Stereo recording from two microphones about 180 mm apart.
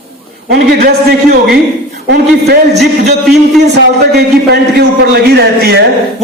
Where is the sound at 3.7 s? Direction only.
65° right (ahead or behind).